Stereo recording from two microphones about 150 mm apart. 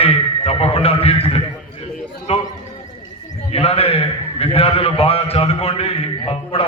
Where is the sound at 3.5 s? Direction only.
40° left (ahead or behind).